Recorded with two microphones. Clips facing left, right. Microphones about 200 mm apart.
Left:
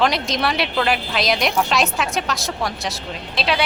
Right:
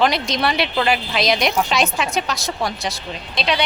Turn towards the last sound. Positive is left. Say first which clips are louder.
# even
turn(degrees=5)  # may be behind; listen again after turning